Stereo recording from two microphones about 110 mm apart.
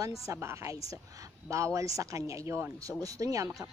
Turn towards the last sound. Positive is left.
turn(degrees=-30)  # may be behind; listen again after turning